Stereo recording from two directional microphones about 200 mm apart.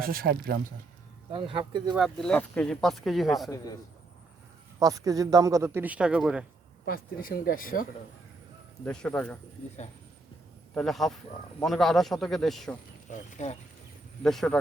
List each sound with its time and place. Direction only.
0.0 s speech: 45° right (ahead or behind)
1.3 s speech: 25° right (ahead or behind)
2.0 s speech: centre (ahead or behind)
4.8 s a man's voice: 15° right (ahead or behind)
6.8 s speech: 45° left (ahead or behind)
8.8 s speech: 5° left (ahead or behind)
10.8 s speech: centre (ahead or behind)
13.1 s speech: 40° left (ahead or behind)
14.3 s speech: 5° left (ahead or behind)